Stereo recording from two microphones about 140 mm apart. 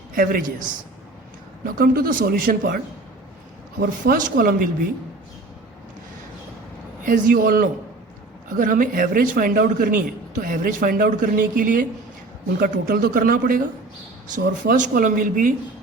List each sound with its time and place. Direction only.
0.1 s a man's voice: 90° right
1.6 s a man's voice: 90° right
7.0 s a man's voice: 75° right (ahead or behind)
8.4 s a man's voice: 70° right (ahead or behind); by 13.6 s 90° right
14.6 s a man's voice: 70° right (ahead or behind)